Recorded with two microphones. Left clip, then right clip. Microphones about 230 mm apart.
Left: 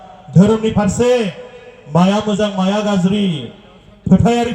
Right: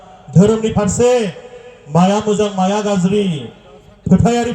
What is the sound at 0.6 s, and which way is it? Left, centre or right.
A man's voice, right.